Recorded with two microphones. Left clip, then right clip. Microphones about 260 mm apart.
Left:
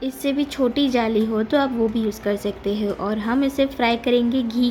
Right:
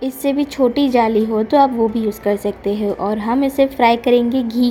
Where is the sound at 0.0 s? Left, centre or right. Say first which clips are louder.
Right 5 dB; centre.